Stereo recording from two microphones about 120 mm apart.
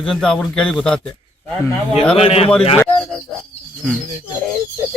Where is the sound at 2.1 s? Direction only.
55° left (ahead or behind).